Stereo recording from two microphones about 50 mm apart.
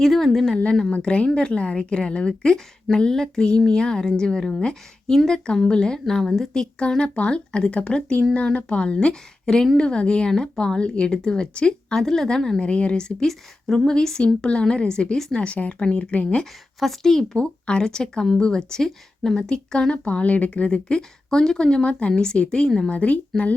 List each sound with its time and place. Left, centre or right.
0.0 s a woman's voice: centre
0.9 s a woman's voice: left; by 6.5 s centre
6.5 s a woman's voice: centre
12.5 s a woman's voice: left
13.2 s a woman's voice: centre; by 16.4 s left
16.4 s a woman's voice: centre
17.3 s a woman's voice: centre
19.4 s a woman's voice: centre
20.1 s a woman's voice: left; by 22.9 s centre
22.9 s a woman's voice: left